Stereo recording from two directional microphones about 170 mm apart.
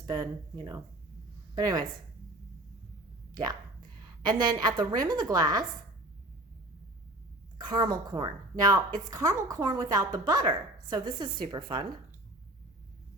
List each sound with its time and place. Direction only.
0.1 s a woman's voice: 25° right (ahead or behind)
3.3 s a woman's voice: 25° right (ahead or behind)
7.6 s a woman's voice: 25° right (ahead or behind)